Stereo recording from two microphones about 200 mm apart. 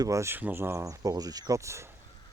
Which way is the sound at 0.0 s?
15° right (ahead or behind).